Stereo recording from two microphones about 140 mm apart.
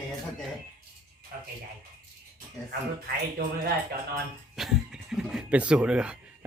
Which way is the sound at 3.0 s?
90° right.